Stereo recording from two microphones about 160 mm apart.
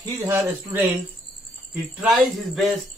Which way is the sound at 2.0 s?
Centre (ahead or behind).